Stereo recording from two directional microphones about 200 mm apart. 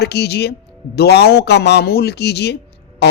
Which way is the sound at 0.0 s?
55° left (ahead or behind).